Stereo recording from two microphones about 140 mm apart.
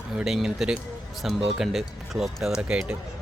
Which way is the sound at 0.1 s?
5° right (ahead or behind).